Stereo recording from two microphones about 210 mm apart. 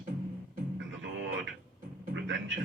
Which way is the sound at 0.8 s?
60° right (ahead or behind).